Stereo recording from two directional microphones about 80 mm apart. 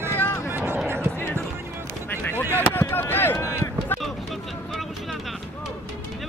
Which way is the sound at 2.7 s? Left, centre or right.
Left.